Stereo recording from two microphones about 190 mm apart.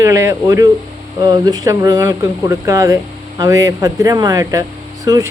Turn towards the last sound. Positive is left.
turn(degrees=-20)  # may be behind; listen again after turning